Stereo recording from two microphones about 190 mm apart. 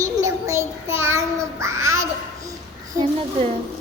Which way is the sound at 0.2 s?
15° right (ahead or behind).